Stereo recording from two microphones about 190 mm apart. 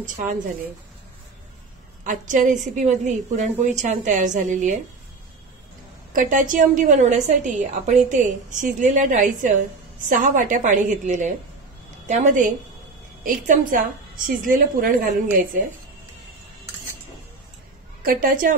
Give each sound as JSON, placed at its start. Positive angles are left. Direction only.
{"t": 0.0, "sound": "a woman's voice", "side_deg": -40}
{"t": 2.0, "sound": "a woman's voice", "side_deg": -40}
{"t": 6.1, "sound": "a woman's voice", "side_deg": -45}
{"t": 18.0, "sound": "a woman's voice", "side_deg": -45}